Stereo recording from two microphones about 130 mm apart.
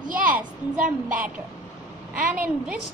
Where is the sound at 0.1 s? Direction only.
90° right.